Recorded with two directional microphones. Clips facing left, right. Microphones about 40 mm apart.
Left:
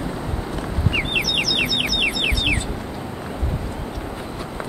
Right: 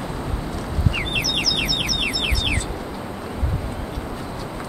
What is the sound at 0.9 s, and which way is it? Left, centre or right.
Bird, left.